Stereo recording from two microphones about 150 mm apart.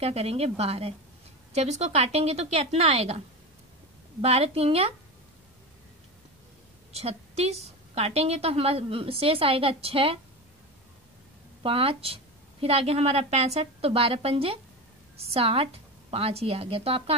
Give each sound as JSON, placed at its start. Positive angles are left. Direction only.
{"t": 0.0, "sound": "speech", "side_deg": -45}
{"t": 4.2, "sound": "a woman's voice", "side_deg": -45}
{"t": 6.9, "sound": "a woman's voice", "side_deg": -40}
{"t": 11.6, "sound": "a woman's voice", "side_deg": -40}